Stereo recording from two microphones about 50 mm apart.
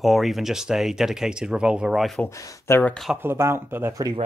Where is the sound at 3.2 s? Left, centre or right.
Right.